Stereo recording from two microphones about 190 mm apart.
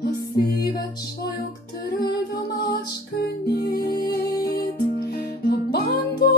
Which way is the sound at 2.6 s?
50° left (ahead or behind).